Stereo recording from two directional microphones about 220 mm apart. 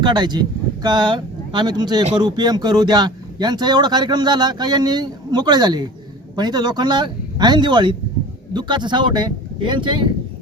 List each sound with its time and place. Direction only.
0.0 s speech: 20° right (ahead or behind)